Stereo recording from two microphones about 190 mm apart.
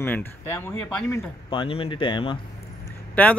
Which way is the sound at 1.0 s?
25° left (ahead or behind).